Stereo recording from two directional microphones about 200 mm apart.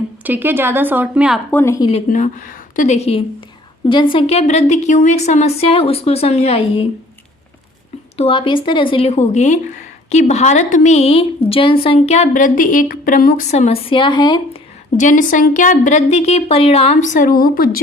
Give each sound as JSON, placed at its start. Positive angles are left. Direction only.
{"t": 0.3, "sound": "a woman's voice", "side_deg": -10}
{"t": 1.5, "sound": "a woman's voice", "side_deg": 10}
{"t": 2.0, "sound": "speech", "side_deg": 40}
{"t": 8.1, "sound": "speech", "side_deg": 30}
{"t": 13.5, "sound": "a woman's voice", "side_deg": 30}
{"t": 14.9, "sound": "speech", "side_deg": 40}